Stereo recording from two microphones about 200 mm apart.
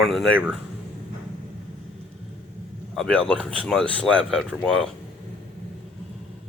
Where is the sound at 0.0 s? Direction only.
Centre (ahead or behind).